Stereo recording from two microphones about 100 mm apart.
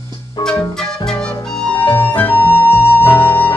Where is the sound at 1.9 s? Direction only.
20° left (ahead or behind).